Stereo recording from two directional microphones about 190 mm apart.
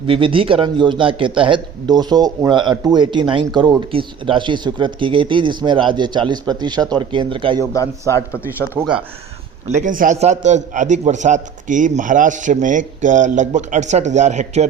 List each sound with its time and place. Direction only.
0.1 s a man's voice: 30° right (ahead or behind)
7.6 s speech: 15° left (ahead or behind)
9.6 s a man's voice: 40° right (ahead or behind)